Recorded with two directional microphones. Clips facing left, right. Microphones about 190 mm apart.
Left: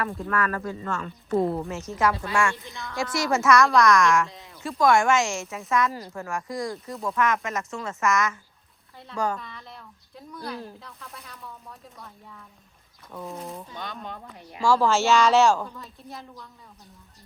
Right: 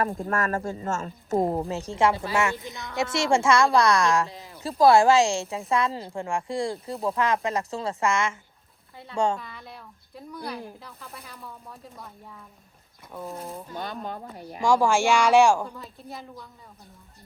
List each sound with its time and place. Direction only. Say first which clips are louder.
0.0 s a woman's voice: right 1 dB; 40° right (ahead or behind)
4.3 s a sound: right 3 dB; centre (ahead or behind)
4.8 s a woman's voice: right 3 dB; 35° right (ahead or behind)
9.4 s speech: even; 5° right (ahead or behind)
14.6 s speech: even; 15° right (ahead or behind)
15.8 s speech: right 1 dB; centre (ahead or behind)